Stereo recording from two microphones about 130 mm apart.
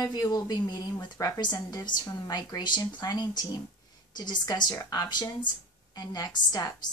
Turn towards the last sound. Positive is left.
turn(degrees=30)  # may be behind; listen again after turning